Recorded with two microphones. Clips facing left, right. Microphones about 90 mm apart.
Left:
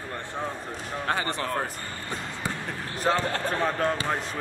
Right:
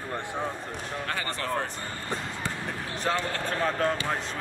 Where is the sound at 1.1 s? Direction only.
20° left (ahead or behind).